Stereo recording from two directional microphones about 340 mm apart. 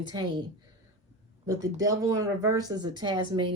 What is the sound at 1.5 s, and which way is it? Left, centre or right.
Speech, centre.